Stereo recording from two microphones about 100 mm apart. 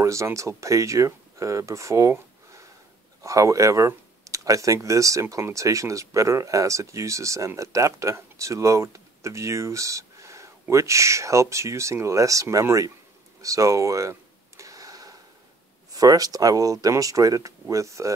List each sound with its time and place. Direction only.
0.0 s speech: 30° right (ahead or behind)
14.6 s a sound: 35° right (ahead or behind)
15.9 s speech: 40° right (ahead or behind)